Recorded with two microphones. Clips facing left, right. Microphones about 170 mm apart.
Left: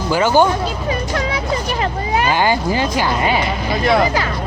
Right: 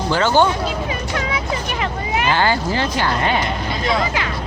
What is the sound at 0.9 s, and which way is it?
Speech, 40° left (ahead or behind).